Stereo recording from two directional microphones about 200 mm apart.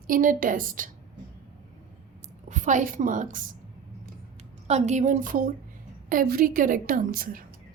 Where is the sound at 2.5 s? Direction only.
40° right (ahead or behind).